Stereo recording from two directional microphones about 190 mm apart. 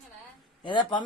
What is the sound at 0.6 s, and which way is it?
Speech, 25° left (ahead or behind).